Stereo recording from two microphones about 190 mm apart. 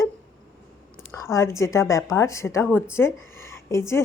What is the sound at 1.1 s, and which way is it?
A woman's voice, 15° left (ahead or behind).